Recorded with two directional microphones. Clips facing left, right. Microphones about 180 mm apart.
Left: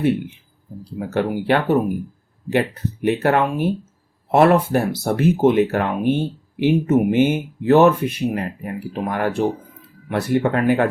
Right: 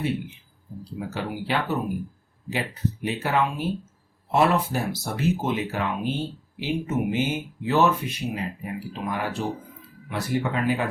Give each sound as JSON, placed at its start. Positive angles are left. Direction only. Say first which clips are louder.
{"t": 0.9, "sound": "speech", "louder": "left 9 dB", "side_deg": 55}